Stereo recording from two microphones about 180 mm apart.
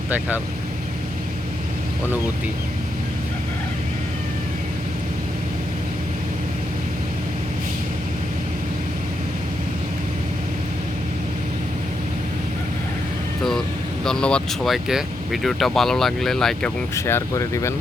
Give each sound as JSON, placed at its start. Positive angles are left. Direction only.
{"t": 14.0, "sound": "speech", "side_deg": 5}
{"t": 16.9, "sound": "speech", "side_deg": 15}